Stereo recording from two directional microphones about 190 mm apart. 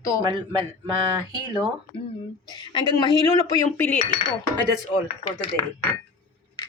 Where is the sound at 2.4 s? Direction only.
20° left (ahead or behind).